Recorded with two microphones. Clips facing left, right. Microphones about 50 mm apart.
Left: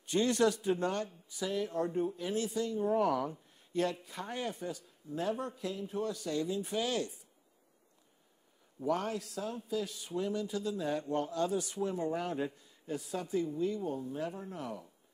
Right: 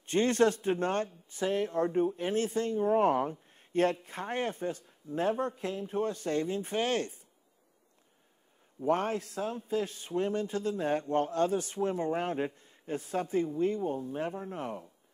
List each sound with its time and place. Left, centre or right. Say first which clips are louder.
0.0 s speech: right 3 dB; right
8.8 s speech: right 4 dB; right